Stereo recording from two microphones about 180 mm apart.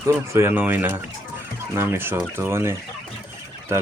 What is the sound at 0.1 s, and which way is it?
Speech, 15° right (ahead or behind).